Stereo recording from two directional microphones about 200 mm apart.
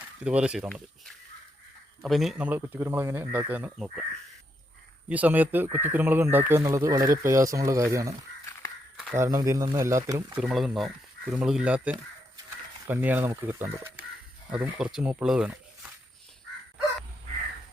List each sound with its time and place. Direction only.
0.3 s speech: 5° right (ahead or behind)
2.0 s speech: centre (ahead or behind)
5.0 s speech: 5° right (ahead or behind)
9.1 s speech: 15° right (ahead or behind)
10.4 s speech: centre (ahead or behind)